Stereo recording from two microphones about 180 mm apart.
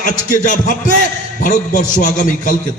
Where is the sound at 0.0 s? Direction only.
45° left (ahead or behind).